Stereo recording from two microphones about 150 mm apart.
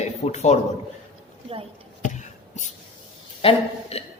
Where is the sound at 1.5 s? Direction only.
40° right (ahead or behind).